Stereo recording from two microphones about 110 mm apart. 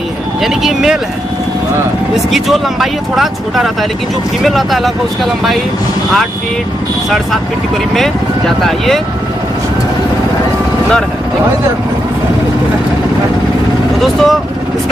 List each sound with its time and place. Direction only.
0.4 s speech: centre (ahead or behind)
2.3 s speech: centre (ahead or behind)
7.9 s speech: 5° left (ahead or behind)
14.0 s speech: centre (ahead or behind)